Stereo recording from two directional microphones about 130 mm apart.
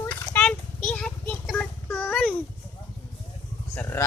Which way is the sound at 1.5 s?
10° left (ahead or behind).